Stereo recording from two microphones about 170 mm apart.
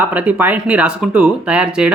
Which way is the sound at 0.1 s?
10° right (ahead or behind).